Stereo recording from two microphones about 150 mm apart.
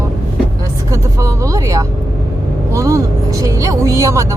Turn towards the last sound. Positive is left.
turn(degrees=-20)  # may be behind; listen again after turning